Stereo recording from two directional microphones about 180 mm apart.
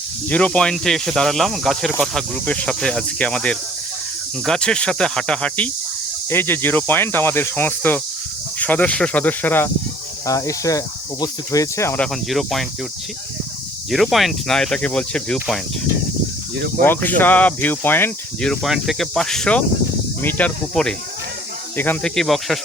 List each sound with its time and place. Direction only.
0.3 s speech: 5° left (ahead or behind)
12.3 s speech: centre (ahead or behind)
13.9 s speech: centre (ahead or behind)